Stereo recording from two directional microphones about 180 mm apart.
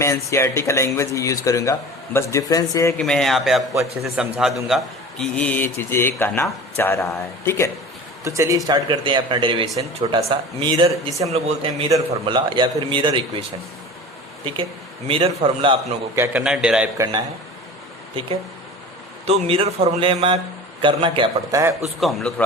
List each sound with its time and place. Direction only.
0.0 s speech: 15° left (ahead or behind)
3.0 s a man's voice: 5° left (ahead or behind)
8.2 s a man's voice: 15° right (ahead or behind)
14.4 s a man's voice: 30° right (ahead or behind)
16.1 s a man's voice: 15° right (ahead or behind)
16.4 s a man's voice: 5° right (ahead or behind)
17.0 s a man's voice: 20° right (ahead or behind)
19.2 s a man's voice: 35° right (ahead or behind)
22.0 s a man's voice: 5° left (ahead or behind)